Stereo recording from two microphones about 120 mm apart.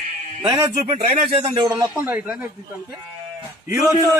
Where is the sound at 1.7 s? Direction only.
35° right (ahead or behind).